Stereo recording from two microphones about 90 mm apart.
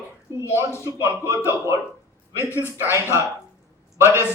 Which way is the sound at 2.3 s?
30° left (ahead or behind).